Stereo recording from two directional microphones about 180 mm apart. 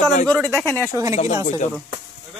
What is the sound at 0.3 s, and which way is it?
Speech, 5° left (ahead or behind).